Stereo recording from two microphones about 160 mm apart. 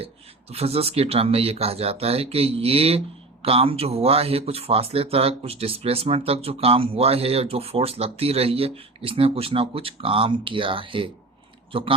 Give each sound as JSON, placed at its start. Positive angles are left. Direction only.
{"t": 0.5, "sound": "speech", "side_deg": -40}